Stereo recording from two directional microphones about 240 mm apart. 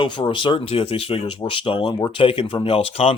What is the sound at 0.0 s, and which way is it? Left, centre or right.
Speech, centre.